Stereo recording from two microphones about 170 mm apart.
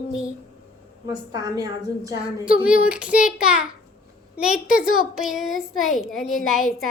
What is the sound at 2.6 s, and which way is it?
A child's voice, 5° right (ahead or behind).